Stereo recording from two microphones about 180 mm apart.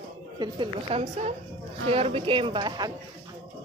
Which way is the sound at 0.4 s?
30° right (ahead or behind).